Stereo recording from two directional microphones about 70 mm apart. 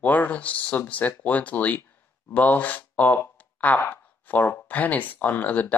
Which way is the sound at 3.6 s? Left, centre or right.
Left.